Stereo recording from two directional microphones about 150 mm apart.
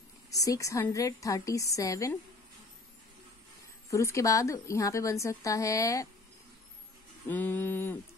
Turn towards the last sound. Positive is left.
turn(degrees=15)  # may be behind; listen again after turning